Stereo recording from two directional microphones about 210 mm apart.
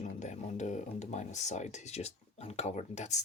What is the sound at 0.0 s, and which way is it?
Speech, 35° left (ahead or behind).